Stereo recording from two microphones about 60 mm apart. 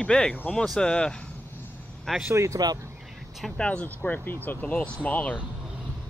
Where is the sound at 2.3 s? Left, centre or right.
Right.